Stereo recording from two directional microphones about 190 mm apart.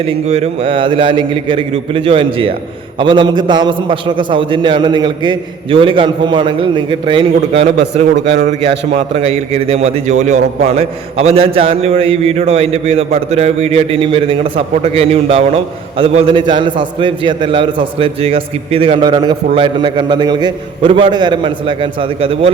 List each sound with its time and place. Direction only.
0.3 s a man's voice: 30° right (ahead or behind)
8.1 s a man's voice: 65° right (ahead or behind)
8.4 s a man's voice: 40° right (ahead or behind)